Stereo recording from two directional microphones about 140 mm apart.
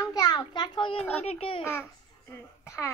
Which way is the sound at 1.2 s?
45° left (ahead or behind).